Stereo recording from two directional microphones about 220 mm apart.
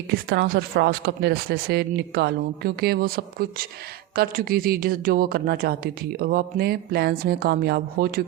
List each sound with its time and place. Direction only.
0.1 s speech: 50° right (ahead or behind)
4.1 s speech: 40° right (ahead or behind)